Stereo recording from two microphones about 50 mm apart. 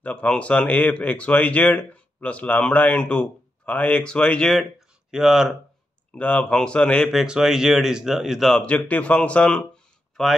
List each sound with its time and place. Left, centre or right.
0.0 s speech: left
4.7 s a sound: centre
6.1 s speech: left
7.2 s speech: centre
8.4 s speech: centre
8.6 s speech: left
10.2 s speech: centre